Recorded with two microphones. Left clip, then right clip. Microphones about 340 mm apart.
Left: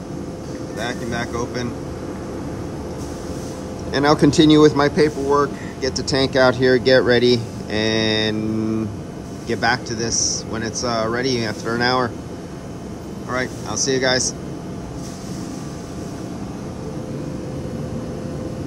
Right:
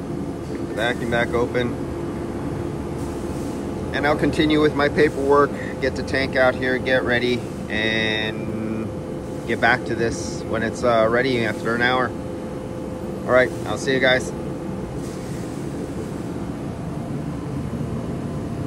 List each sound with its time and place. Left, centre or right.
0.7 s speech: centre
3.9 s speech: centre
9.5 s speech: centre
13.3 s speech: centre